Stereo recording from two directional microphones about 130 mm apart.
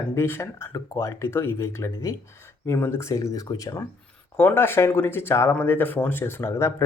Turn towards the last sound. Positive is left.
turn(degrees=20)  # may be behind; listen again after turning